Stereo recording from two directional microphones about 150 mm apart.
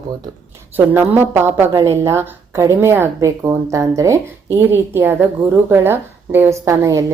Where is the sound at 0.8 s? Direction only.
15° right (ahead or behind).